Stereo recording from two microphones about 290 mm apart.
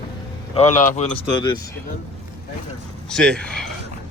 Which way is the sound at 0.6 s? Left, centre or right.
Left.